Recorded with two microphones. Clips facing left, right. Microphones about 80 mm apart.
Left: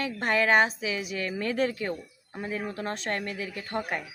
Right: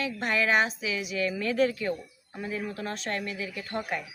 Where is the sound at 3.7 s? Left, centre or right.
Left.